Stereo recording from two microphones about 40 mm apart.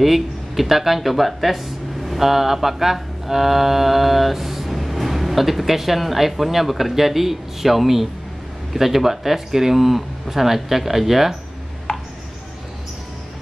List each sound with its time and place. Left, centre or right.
0.0 s mantra: centre
8.7 s speech: centre
11.9 s a sound: left